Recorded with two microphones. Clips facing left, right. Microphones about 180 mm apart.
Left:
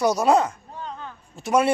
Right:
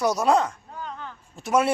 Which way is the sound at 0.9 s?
15° left (ahead or behind).